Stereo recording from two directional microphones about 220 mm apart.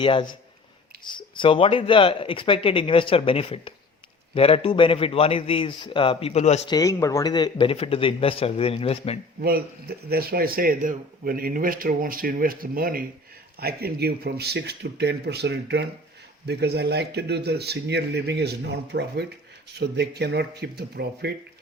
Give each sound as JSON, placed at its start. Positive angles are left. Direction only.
{"t": 0.0, "sound": "speech", "side_deg": 25}
{"t": 6.7, "sound": "speech", "side_deg": 15}
{"t": 9.4, "sound": "a man's voice", "side_deg": -45}